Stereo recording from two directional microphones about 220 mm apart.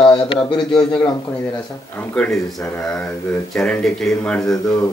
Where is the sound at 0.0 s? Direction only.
20° left (ahead or behind).